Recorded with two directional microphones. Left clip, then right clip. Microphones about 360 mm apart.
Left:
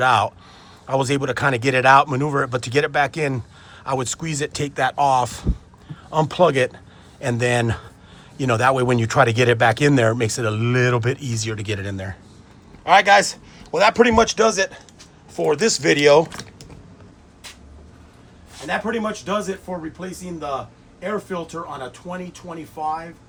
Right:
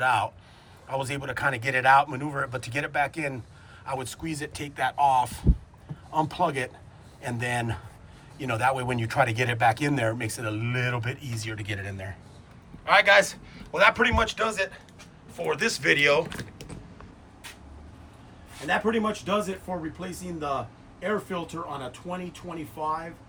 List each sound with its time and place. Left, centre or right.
0.0 s speech: centre
18.9 s speech: centre
21.0 s speech: centre